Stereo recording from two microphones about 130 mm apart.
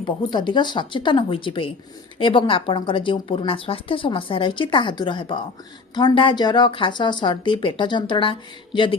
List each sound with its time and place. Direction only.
0.0 s speech: 35° left (ahead or behind)